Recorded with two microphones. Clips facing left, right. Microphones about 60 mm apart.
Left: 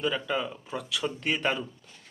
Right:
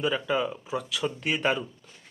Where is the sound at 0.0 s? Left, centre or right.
Centre.